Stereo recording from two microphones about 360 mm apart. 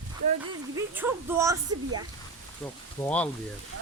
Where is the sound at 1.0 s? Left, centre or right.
Centre.